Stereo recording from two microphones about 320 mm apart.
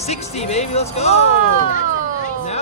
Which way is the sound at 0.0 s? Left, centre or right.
Centre.